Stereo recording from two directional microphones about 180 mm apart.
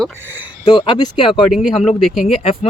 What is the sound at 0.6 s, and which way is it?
Speech, 25° left (ahead or behind).